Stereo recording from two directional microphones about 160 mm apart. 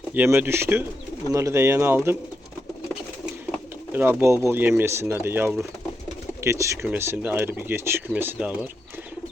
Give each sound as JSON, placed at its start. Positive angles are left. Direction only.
{"t": 0.1, "sound": "speech", "side_deg": -10}
{"t": 4.2, "sound": "speech", "side_deg": -15}